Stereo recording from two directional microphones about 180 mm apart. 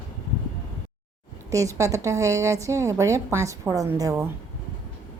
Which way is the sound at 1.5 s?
15° right (ahead or behind).